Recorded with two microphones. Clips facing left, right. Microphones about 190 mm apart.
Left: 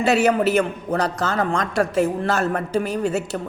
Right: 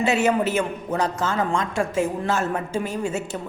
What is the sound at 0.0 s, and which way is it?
Speech, 40° left (ahead or behind).